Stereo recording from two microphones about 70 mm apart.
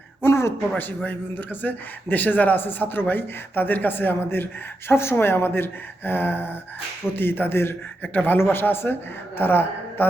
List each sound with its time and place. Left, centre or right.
0.2 s a sound: left
0.8 s a man's voice: left
8.0 s a man's voice: left